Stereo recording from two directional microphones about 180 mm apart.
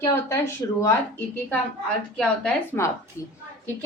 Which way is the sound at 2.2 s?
10° left (ahead or behind).